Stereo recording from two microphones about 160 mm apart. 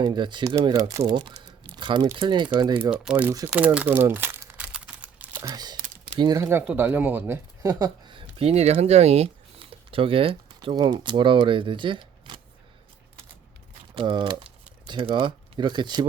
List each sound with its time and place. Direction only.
0.0 s speech: 25° right (ahead or behind)
2.9 s speech: 5° right (ahead or behind)
3.8 s crumpling: 10° right (ahead or behind)
5.4 s speech: 25° right (ahead or behind)
13.9 s speech: 35° right (ahead or behind)